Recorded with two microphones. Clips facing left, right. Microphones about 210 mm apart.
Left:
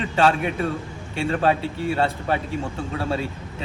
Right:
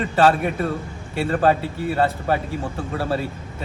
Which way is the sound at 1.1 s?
Centre (ahead or behind).